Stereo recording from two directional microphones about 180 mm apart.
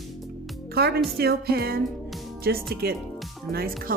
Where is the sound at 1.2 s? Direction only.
60° right (ahead or behind).